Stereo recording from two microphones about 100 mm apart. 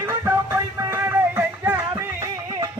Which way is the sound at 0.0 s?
25° right (ahead or behind).